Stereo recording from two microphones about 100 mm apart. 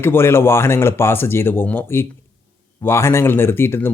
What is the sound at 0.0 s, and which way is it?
Speech, 25° left (ahead or behind).